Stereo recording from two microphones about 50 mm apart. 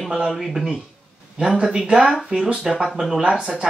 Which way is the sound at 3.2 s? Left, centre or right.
Centre.